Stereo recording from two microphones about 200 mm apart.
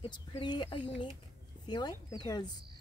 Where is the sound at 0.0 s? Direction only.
25° left (ahead or behind).